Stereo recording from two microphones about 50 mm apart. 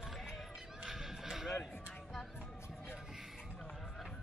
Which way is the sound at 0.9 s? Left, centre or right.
Centre.